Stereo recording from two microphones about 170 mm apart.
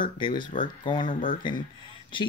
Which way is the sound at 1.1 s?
55° left (ahead or behind).